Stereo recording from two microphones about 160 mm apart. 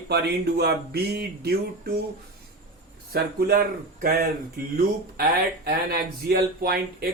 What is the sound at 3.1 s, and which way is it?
Speech, 75° right (ahead or behind).